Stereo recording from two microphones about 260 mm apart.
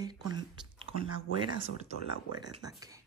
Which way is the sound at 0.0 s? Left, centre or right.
Centre.